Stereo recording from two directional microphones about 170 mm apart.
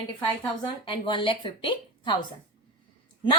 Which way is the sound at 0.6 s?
30° left (ahead or behind).